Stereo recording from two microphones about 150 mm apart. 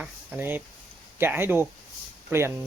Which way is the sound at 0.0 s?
10° right (ahead or behind).